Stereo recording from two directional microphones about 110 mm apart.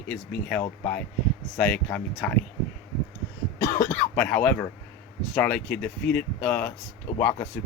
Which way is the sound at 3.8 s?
15° left (ahead or behind).